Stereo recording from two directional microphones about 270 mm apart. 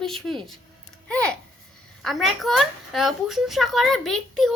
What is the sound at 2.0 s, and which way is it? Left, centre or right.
A woman's voice, centre.